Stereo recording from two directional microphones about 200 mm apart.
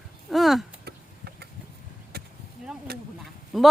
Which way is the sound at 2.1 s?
50° right (ahead or behind).